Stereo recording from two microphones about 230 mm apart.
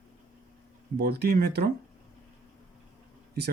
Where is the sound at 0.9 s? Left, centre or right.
Right.